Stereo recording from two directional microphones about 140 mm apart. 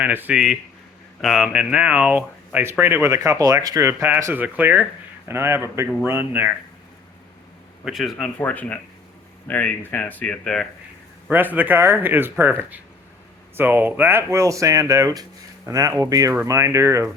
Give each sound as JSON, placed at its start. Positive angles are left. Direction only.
{"t": 0.0, "sound": "speech", "side_deg": -10}
{"t": 7.9, "sound": "a man's voice", "side_deg": 0}
{"t": 8.4, "sound": "speech", "side_deg": 10}
{"t": 11.3, "sound": "speech", "side_deg": -15}